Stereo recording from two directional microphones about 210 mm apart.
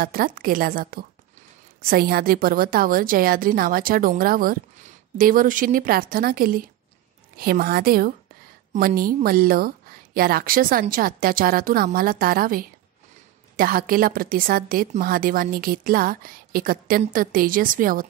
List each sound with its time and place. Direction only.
0.0 s a woman's voice: 45° right (ahead or behind)